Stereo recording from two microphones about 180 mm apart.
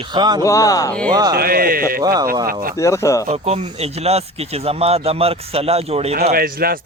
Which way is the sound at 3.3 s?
35° right (ahead or behind).